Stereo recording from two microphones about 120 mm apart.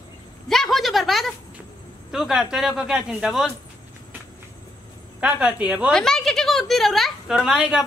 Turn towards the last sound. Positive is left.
turn(degrees=-5)  # may be behind; listen again after turning